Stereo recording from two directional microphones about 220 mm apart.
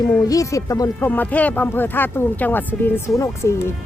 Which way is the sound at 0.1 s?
15° left (ahead or behind).